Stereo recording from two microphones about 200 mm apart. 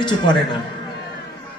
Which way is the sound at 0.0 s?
25° left (ahead or behind).